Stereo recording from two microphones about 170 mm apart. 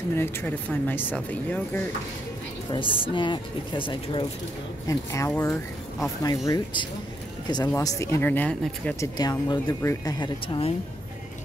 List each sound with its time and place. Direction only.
0.1 s speech: 15° left (ahead or behind)
2.7 s speech: 30° left (ahead or behind)
4.8 s speech: 20° left (ahead or behind)
9.1 s speech: 25° left (ahead or behind)